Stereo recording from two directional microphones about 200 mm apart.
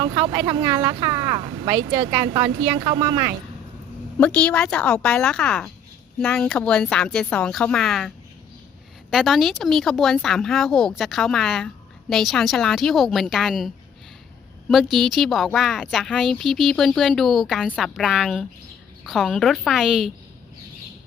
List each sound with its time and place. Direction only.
0.0 s speech: 25° right (ahead or behind)
4.2 s speech: 5° left (ahead or behind)
14.7 s speech: centre (ahead or behind)